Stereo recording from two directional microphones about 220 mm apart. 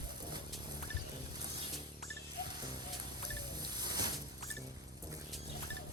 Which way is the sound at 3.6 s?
20° right (ahead or behind).